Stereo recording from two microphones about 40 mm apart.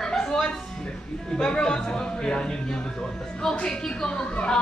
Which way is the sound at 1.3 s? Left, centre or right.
Left.